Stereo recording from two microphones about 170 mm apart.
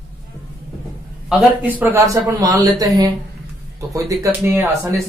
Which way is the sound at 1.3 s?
10° right (ahead or behind).